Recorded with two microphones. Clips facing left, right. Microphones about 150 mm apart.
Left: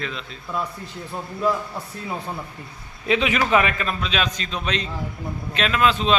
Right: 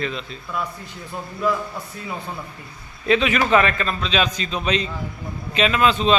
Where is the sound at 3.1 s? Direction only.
15° left (ahead or behind); by 6.1 s centre (ahead or behind).